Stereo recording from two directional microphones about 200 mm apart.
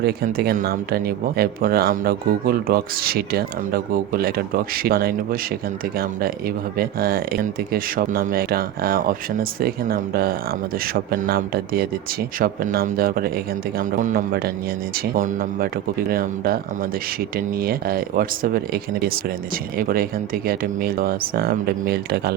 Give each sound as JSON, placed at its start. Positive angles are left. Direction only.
{"t": 0.0, "sound": "speech", "side_deg": -50}